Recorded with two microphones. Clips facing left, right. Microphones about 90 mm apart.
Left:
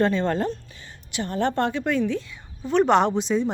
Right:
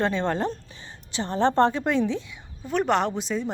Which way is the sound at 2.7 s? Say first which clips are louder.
Left 5 dB; centre (ahead or behind).